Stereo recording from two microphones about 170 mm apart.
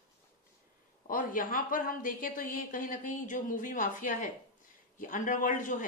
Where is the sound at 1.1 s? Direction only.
55° left (ahead or behind).